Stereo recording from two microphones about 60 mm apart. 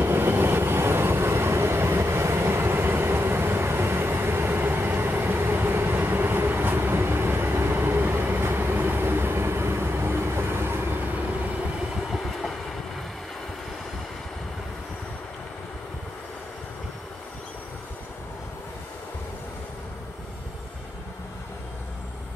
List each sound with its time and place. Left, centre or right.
0.0 s train: right
12.1 s train: centre